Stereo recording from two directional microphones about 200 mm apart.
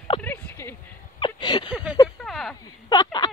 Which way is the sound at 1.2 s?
25° left (ahead or behind).